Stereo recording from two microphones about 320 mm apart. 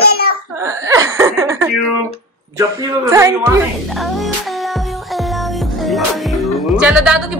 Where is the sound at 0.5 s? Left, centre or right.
Centre.